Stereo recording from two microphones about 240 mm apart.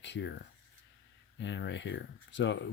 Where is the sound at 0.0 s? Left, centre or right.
Left.